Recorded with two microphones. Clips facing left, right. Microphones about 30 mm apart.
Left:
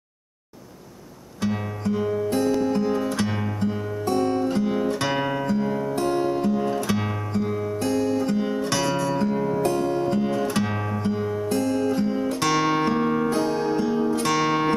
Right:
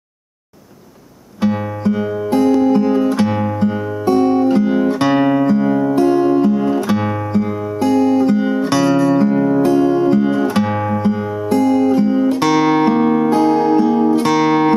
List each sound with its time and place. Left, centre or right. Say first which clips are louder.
1.4 s music: right 9 dB; right
6.0 s music: right 8 dB; centre